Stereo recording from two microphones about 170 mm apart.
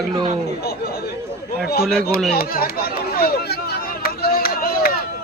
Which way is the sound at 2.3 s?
60° left (ahead or behind).